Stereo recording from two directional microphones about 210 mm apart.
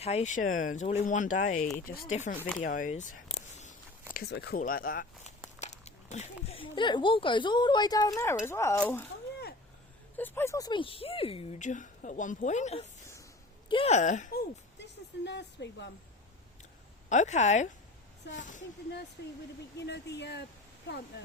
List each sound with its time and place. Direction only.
0.0 s speech: 30° left (ahead or behind); by 2.1 s 45° left (ahead or behind)
2.6 s a sound: 40° left (ahead or behind)
4.1 s speech: 50° left (ahead or behind); by 9.0 s 10° left (ahead or behind)
10.2 s a woman's voice: 10° left (ahead or behind); by 14.4 s 40° left (ahead or behind)
14.8 s a sound: 55° left (ahead or behind)
17.1 s speech: 35° left (ahead or behind)
19.2 s speech: 55° left (ahead or behind)